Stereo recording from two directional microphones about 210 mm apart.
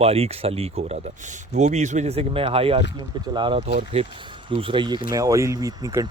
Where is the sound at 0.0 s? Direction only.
30° right (ahead or behind).